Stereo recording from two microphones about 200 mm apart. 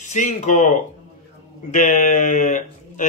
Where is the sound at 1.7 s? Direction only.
40° left (ahead or behind).